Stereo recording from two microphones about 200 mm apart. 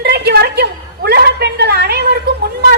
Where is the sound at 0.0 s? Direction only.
55° right (ahead or behind).